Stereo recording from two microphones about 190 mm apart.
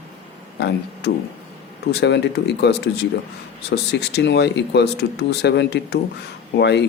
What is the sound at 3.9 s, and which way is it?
Speech, 65° left (ahead or behind).